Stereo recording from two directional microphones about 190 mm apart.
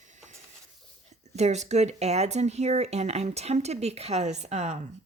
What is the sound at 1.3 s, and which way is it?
Speech, 35° right (ahead or behind).